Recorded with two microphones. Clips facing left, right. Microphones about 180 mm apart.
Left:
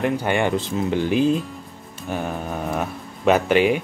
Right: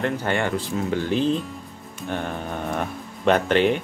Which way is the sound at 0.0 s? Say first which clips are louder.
Left 3 dB; 15° left (ahead or behind).